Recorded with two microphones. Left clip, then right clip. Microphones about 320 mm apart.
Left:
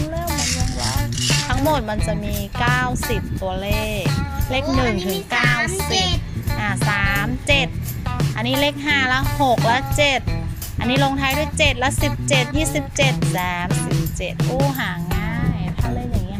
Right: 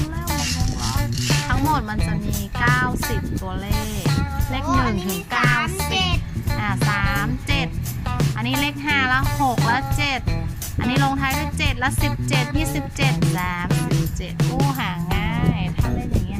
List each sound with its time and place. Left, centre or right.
0.0 s music: centre